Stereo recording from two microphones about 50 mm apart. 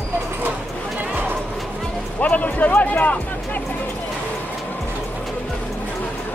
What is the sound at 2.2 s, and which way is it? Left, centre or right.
Music, left.